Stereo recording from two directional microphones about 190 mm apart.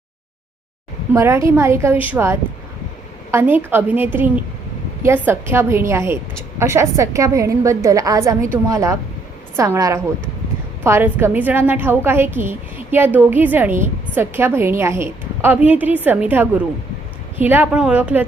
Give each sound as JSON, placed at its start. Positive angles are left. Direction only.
{"t": 1.1, "sound": "a woman's voice", "side_deg": -15}